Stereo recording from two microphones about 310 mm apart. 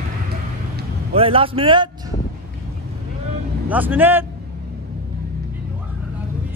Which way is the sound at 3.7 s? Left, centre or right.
Centre.